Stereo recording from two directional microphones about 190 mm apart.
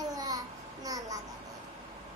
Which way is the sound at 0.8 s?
20° right (ahead or behind).